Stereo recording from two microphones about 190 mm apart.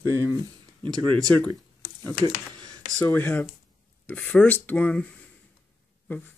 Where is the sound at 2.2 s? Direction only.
20° right (ahead or behind).